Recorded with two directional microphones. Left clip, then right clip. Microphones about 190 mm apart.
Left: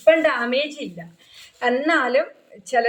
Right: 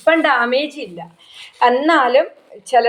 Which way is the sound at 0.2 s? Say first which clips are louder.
Right 5 dB; 10° left (ahead or behind).